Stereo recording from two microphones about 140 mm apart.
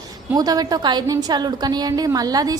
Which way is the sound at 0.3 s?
25° right (ahead or behind).